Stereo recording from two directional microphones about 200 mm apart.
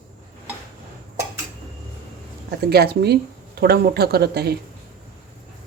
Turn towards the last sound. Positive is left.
turn(degrees=-55)  # may be behind; listen again after turning